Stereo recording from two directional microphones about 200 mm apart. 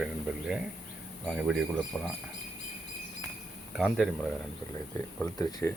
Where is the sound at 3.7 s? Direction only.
Centre (ahead or behind).